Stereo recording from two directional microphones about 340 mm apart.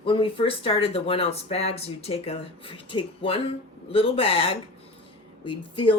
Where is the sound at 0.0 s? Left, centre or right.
Centre.